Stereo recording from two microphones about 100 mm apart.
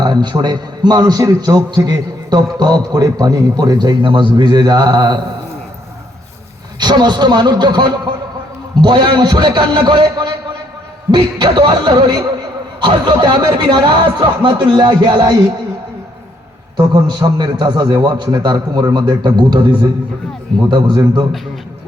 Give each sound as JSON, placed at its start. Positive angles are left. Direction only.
{"t": 0.0, "sound": "a man's voice", "side_deg": -50}
{"t": 6.7, "sound": "a man's voice", "side_deg": -45}
{"t": 16.7, "sound": "a man's voice", "side_deg": -45}